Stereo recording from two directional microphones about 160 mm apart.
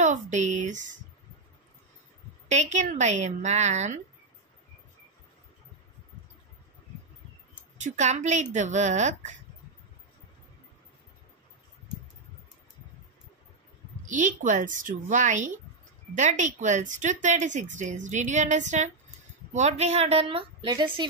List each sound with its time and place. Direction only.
0.0 s a woman's voice: 50° right (ahead or behind)
2.5 s a woman's voice: 45° right (ahead or behind)
7.7 s a woman's voice: 50° right (ahead or behind)
14.0 s a woman's voice: 55° right (ahead or behind); by 21.1 s 30° right (ahead or behind)